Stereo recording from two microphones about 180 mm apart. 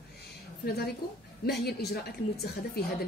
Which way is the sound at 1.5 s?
65° left (ahead or behind).